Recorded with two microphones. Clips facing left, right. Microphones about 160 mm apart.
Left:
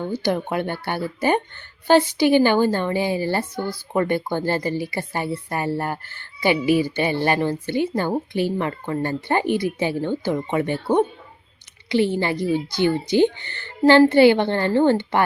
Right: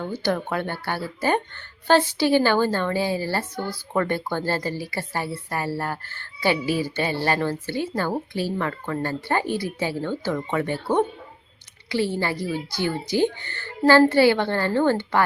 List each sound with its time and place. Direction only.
0.0 s speech: 15° left (ahead or behind)